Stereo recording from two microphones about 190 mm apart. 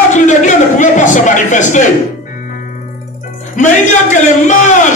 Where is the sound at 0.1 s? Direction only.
40° left (ahead or behind).